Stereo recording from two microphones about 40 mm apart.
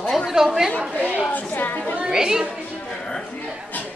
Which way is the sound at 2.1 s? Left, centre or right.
Centre.